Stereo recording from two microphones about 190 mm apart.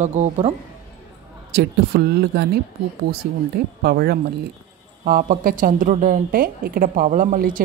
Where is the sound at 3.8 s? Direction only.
55° right (ahead or behind).